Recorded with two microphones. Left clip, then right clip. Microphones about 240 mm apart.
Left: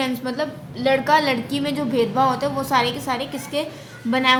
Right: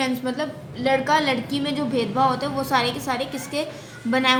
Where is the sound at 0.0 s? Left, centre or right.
Centre.